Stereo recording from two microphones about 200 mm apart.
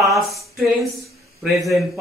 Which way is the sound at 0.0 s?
Centre (ahead or behind).